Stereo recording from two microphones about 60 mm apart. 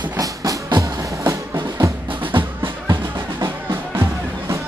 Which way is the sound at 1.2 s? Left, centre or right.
Right.